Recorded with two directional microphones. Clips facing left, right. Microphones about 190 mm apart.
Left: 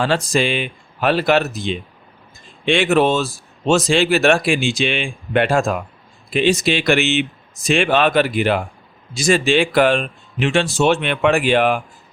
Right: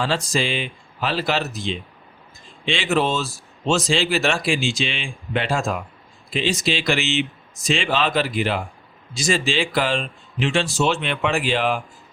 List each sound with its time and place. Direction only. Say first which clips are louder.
0.0 s speech: left 5 dB; 60° left (ahead or behind)